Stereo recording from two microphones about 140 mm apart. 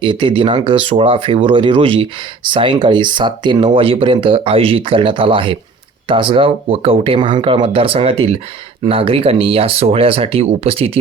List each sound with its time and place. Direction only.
0.0 s speech: 35° right (ahead or behind)